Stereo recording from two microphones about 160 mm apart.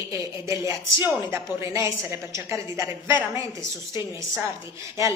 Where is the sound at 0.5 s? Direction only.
15° right (ahead or behind).